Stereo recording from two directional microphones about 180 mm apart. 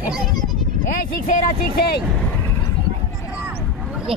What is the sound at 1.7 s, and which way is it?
Speech, 60° left (ahead or behind).